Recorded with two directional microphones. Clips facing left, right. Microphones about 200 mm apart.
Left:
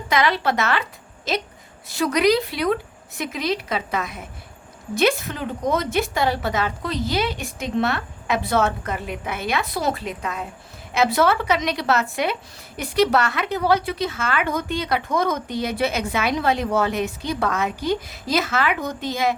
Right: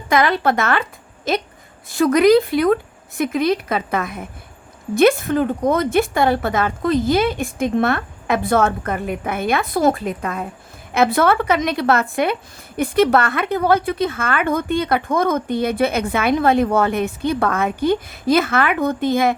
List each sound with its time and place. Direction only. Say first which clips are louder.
0.1 s a woman's voice: right 4 dB; 50° right (ahead or behind)